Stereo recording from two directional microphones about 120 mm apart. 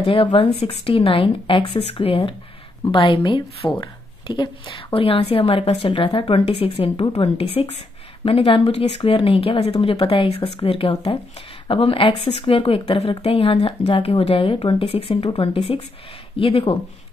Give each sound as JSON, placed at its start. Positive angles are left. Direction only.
{"t": 0.0, "sound": "speech", "side_deg": 50}